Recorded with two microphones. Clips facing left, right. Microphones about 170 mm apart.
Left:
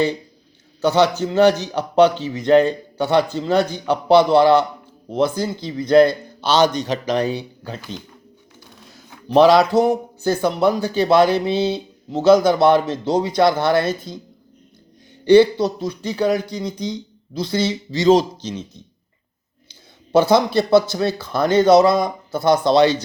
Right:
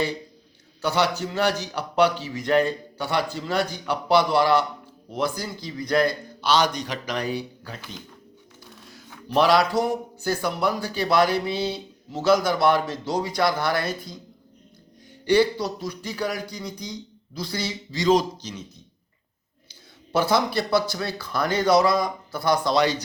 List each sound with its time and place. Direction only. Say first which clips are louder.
0.8 s a man's voice: left 7 dB; 25° left (ahead or behind)
9.3 s a man's voice: left 7 dB; 25° left (ahead or behind)
15.2 s a man's voice: left 8 dB; 25° left (ahead or behind)
20.1 s a man's voice: left 7 dB; 25° left (ahead or behind)